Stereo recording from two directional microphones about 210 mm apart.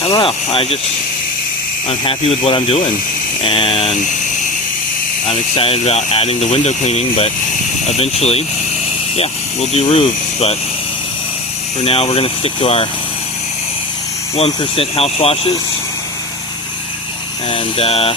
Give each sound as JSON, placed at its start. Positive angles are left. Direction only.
{"t": 0.0, "sound": "speech", "side_deg": 25}
{"t": 1.9, "sound": "speech", "side_deg": 25}
{"t": 5.3, "sound": "speech", "side_deg": 25}
{"t": 11.9, "sound": "speech", "side_deg": 25}
{"t": 14.3, "sound": "speech", "side_deg": 25}
{"t": 17.5, "sound": "speech", "side_deg": 30}